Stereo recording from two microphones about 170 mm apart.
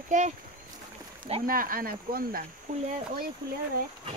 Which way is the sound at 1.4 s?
55° right (ahead or behind).